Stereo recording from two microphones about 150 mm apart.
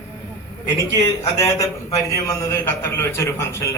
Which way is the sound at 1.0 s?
20° left (ahead or behind).